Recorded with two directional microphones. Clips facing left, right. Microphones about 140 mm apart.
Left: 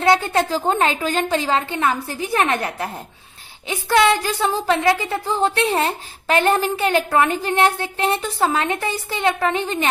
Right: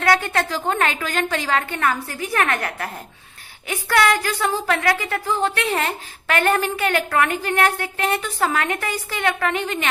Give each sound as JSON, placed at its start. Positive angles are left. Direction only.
{"t": 0.0, "sound": "a woman's voice", "side_deg": 25}